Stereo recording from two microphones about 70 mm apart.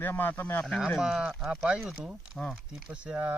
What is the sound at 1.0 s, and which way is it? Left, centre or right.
Speech, centre.